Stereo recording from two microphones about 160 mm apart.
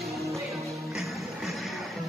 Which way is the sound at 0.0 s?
Centre (ahead or behind).